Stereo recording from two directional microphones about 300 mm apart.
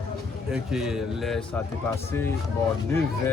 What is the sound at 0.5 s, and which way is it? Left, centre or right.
Speech, centre.